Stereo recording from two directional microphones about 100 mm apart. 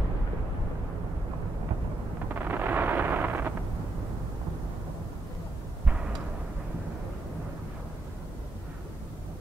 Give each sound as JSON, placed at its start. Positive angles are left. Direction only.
{"t": 2.3, "sound": "artillery fire", "side_deg": -20}